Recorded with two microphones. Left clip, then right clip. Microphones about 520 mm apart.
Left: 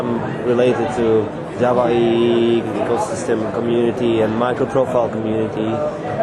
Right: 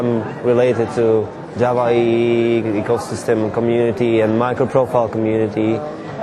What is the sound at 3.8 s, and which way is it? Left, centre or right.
A man's voice, right.